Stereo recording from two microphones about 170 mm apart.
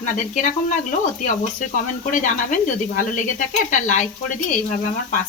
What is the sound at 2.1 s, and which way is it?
Speech, 50° left (ahead or behind).